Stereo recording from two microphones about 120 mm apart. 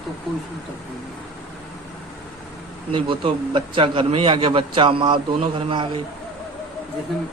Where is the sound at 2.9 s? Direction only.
45° right (ahead or behind).